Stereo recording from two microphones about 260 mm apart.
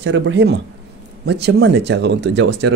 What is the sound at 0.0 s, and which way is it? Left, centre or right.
Speech, right.